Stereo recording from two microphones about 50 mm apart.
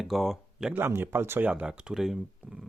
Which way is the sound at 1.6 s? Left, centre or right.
Centre.